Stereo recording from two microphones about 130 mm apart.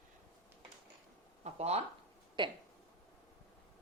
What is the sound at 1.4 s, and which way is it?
Speech, 55° right (ahead or behind).